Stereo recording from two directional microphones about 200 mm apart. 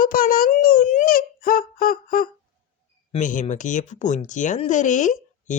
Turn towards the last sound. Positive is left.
turn(degrees=40)  # may be behind; listen again after turning